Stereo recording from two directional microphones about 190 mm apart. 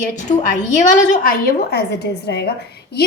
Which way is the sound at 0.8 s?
45° left (ahead or behind).